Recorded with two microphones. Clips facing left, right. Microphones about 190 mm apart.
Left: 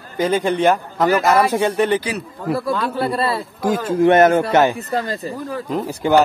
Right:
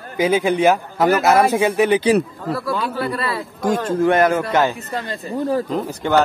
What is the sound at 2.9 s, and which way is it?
Speech, 30° left (ahead or behind).